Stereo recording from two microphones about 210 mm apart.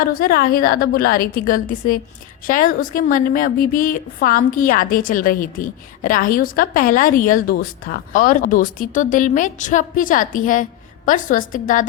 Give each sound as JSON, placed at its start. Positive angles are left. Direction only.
{"t": 0.1, "sound": "a woman's voice", "side_deg": 45}